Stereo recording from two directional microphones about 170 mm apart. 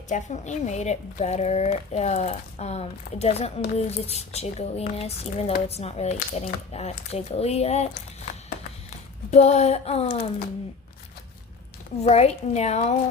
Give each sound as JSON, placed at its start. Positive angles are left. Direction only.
{"t": 0.1, "sound": "speech", "side_deg": 45}
{"t": 9.3, "sound": "speech", "side_deg": 40}
{"t": 12.0, "sound": "speech", "side_deg": 40}